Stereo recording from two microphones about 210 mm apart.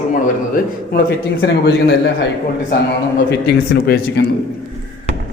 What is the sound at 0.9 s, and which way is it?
Speech, 50° left (ahead or behind).